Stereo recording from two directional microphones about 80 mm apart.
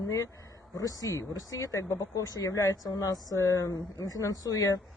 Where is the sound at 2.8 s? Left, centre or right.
Left.